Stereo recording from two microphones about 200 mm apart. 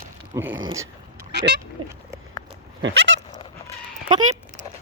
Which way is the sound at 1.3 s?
55° right (ahead or behind).